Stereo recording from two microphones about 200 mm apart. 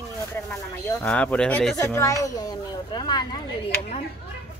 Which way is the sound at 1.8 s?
15° left (ahead or behind).